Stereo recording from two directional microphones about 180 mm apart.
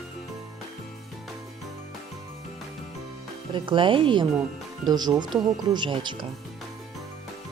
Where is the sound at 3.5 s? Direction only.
25° right (ahead or behind).